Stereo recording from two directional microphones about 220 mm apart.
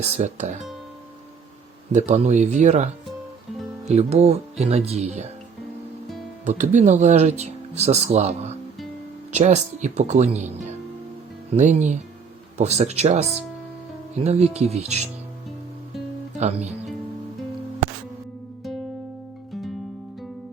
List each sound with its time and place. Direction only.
0.2 s speech: 30° right (ahead or behind)
1.9 s speech: 30° right (ahead or behind)
6.4 s speech: 35° right (ahead or behind)
14.3 s speech: 30° right (ahead or behind)
16.4 s speech: 30° right (ahead or behind)